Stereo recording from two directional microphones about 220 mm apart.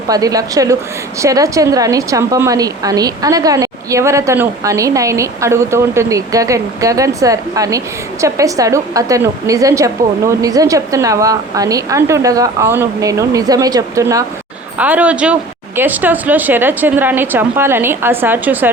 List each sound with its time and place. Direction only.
0.1 s a woman's voice: 15° right (ahead or behind)